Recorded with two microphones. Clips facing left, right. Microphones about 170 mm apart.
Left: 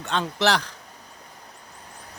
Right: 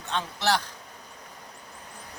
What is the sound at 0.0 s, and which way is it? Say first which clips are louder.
Speech: left 5 dB; 90° left.